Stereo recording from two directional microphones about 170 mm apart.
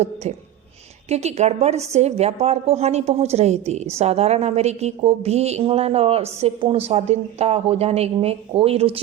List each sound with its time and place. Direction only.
1.1 s a woman's voice: 40° right (ahead or behind)